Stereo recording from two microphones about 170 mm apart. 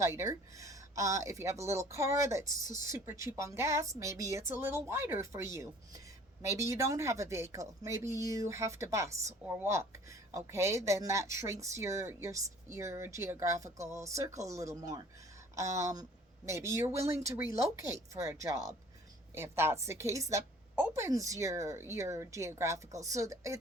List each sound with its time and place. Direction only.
0.0 s speech: 15° right (ahead or behind)